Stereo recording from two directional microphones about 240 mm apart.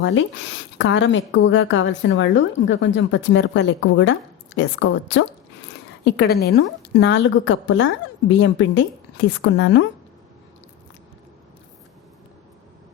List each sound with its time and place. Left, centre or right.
0.0 s a woman's voice: left